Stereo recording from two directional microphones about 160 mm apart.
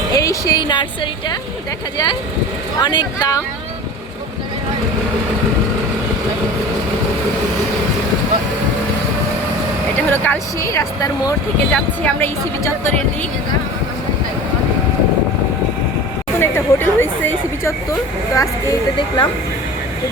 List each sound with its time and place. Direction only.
0.1 s speech: 20° left (ahead or behind)
2.7 s speech: 30° left (ahead or behind)
10.1 s speech: 15° left (ahead or behind)
11.7 s speech: 10° left (ahead or behind)
16.4 s speech: 15° left (ahead or behind)